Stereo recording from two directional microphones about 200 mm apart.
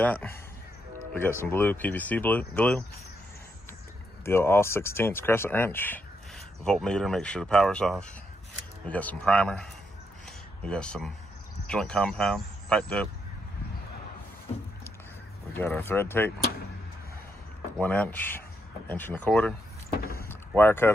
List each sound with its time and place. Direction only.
0.0 s speech: 10° left (ahead or behind)
4.2 s speech: 10° left (ahead or behind)
10.7 s speech: 5° left (ahead or behind)
15.5 s speech: 10° left (ahead or behind)
17.7 s speech: 5° left (ahead or behind)
20.0 s vehicle: 45° left (ahead or behind)
20.2 s vehicle: 10° left (ahead or behind)